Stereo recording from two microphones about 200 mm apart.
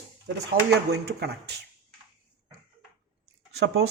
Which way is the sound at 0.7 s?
55° right (ahead or behind).